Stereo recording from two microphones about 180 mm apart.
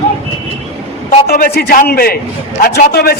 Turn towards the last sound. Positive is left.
turn(degrees=60)  # may be behind; listen again after turning